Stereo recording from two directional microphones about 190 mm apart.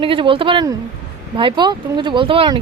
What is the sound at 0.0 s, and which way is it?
Speech, 25° right (ahead or behind).